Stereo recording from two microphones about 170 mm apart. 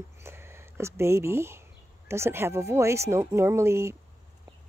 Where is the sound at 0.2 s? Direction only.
15° right (ahead or behind).